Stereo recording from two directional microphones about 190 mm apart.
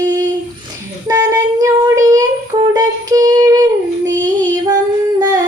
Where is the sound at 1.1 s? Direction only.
15° right (ahead or behind).